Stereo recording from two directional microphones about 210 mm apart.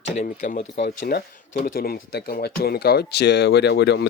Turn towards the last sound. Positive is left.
turn(degrees=55)  # may be behind; listen again after turning